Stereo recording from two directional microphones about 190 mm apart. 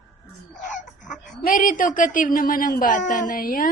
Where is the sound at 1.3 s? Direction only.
45° left (ahead or behind).